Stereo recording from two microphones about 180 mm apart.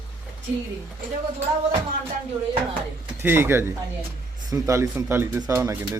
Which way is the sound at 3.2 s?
10° right (ahead or behind).